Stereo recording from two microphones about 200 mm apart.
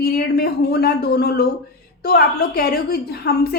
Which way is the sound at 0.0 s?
50° left (ahead or behind).